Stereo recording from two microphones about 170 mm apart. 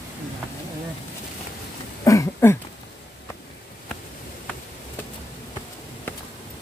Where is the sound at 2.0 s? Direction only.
20° left (ahead or behind).